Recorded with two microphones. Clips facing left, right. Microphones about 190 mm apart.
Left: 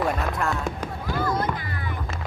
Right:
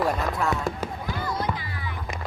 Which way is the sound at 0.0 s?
Centre (ahead or behind).